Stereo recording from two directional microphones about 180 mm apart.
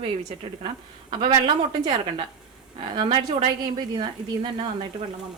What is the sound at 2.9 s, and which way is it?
Speech, 25° right (ahead or behind).